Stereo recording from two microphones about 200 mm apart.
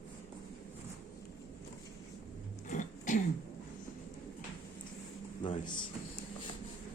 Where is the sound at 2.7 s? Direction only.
40° left (ahead or behind).